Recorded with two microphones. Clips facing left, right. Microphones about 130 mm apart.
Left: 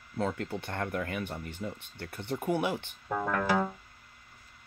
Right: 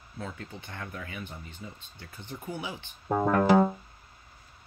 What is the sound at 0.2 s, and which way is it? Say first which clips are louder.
Speech: left 8 dB; 65° left (ahead or behind).